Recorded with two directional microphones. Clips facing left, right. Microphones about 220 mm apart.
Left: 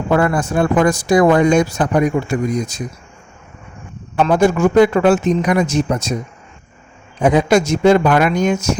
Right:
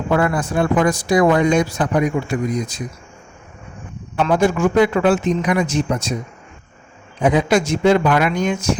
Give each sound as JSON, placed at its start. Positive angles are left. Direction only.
{"t": 0.1, "sound": "speech", "side_deg": 45}
{"t": 4.2, "sound": "speech", "side_deg": 45}
{"t": 7.2, "sound": "speech", "side_deg": 45}